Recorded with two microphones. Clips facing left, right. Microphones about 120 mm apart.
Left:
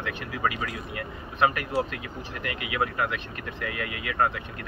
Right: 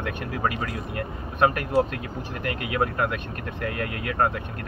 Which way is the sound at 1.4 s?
45° right (ahead or behind).